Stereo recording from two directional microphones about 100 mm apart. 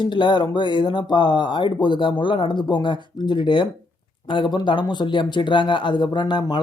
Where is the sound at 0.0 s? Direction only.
50° left (ahead or behind).